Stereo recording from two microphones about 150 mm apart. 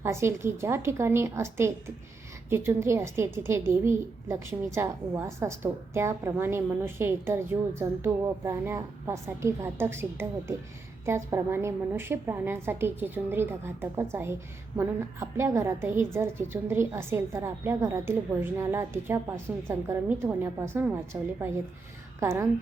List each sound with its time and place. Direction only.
0.0 s a woman's voice: 15° right (ahead or behind)